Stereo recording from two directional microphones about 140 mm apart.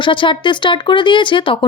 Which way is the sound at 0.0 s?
35° left (ahead or behind).